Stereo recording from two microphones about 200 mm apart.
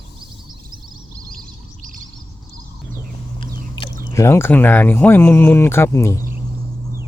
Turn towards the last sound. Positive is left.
turn(degrees=15)  # may be behind; listen again after turning